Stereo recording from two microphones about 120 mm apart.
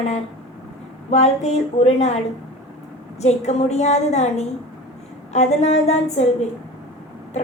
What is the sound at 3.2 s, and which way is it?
A woman's voice, 70° left (ahead or behind).